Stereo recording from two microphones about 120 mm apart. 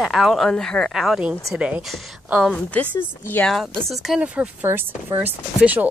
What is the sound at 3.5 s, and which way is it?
Speech, 5° left (ahead or behind).